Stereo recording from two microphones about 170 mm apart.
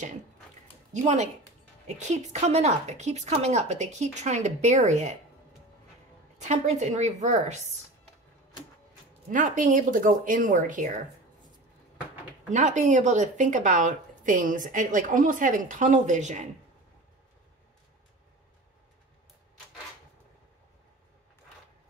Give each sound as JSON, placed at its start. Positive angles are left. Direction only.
{"t": 1.0, "sound": "speech", "side_deg": -40}
{"t": 6.3, "sound": "speech", "side_deg": -45}
{"t": 9.3, "sound": "speech", "side_deg": -50}
{"t": 12.4, "sound": "speech", "side_deg": -45}